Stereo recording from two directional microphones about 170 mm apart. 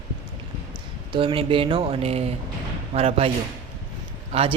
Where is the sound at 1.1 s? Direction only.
30° right (ahead or behind).